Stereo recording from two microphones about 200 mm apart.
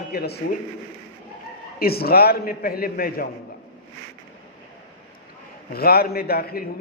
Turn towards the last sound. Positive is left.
turn(degrees=50)  # may be behind; listen again after turning